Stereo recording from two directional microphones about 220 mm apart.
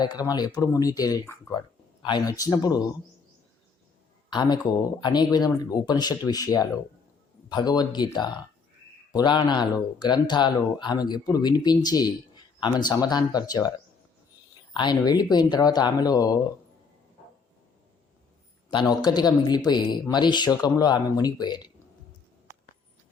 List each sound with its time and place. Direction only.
0.0 s speech: 20° left (ahead or behind)
4.3 s speech: 20° left (ahead or behind)
18.7 s speech: 20° left (ahead or behind)